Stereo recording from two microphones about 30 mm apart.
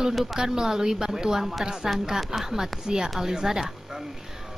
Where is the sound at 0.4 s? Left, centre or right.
Centre.